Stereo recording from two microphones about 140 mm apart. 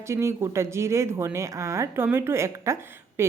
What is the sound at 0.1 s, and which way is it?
Speech, 20° right (ahead or behind).